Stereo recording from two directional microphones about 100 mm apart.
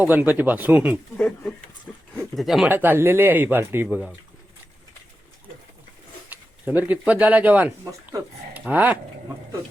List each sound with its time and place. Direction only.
0.0 s speech: 15° right (ahead or behind)
1.1 s speech: 10° left (ahead or behind)
1.9 s a sound: 10° left (ahead or behind)
2.3 s speech: centre (ahead or behind)
2.6 s speech: 20° right (ahead or behind)
3.8 s speech: 10° right (ahead or behind)
6.3 s speech: 15° right (ahead or behind)